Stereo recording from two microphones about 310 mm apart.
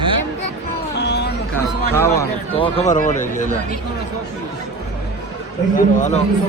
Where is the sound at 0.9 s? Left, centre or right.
Left.